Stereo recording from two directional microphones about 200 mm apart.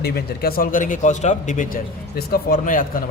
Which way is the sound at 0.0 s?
50° left (ahead or behind).